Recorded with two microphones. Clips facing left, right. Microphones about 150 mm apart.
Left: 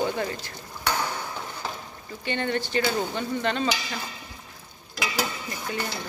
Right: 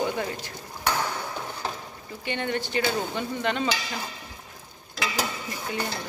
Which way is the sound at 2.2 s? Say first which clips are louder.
Left 1 dB; 10° right (ahead or behind).